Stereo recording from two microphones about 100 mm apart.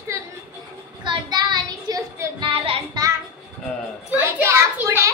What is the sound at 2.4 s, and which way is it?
Music, 65° right (ahead or behind).